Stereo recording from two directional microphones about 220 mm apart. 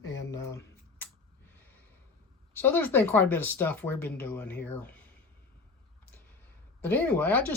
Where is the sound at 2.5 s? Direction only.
10° left (ahead or behind).